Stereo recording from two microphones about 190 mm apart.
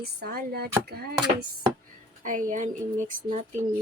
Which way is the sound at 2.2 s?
40° right (ahead or behind).